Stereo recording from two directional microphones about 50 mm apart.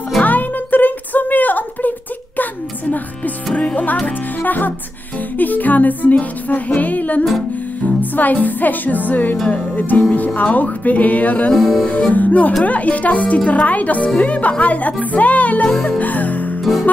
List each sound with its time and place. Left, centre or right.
0.2 s music: left
3.5 s music: left
11.5 s speech: centre
11.8 s music: left
13.5 s a woman's voice: left
16.0 s music: left